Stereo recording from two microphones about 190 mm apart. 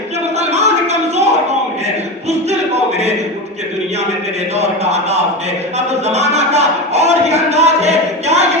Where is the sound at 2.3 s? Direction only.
35° right (ahead or behind).